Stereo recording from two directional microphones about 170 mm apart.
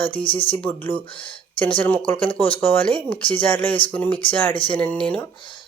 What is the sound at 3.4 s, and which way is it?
Speech, 10° left (ahead or behind).